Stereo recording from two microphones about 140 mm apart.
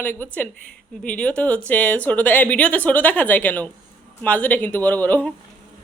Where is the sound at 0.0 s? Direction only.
15° left (ahead or behind).